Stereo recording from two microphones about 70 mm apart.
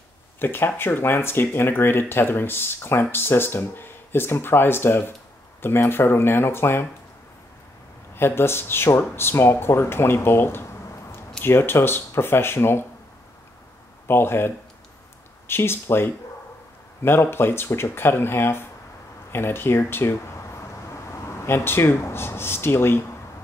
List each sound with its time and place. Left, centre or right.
0.4 s speech: left
8.1 s speech: left
14.0 s speech: left